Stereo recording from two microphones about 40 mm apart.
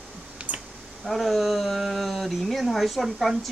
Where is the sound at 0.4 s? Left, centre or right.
Right.